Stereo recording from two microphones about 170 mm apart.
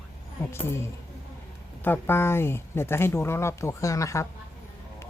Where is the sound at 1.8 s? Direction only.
15° left (ahead or behind).